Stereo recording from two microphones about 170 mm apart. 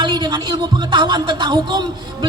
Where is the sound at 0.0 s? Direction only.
25° right (ahead or behind).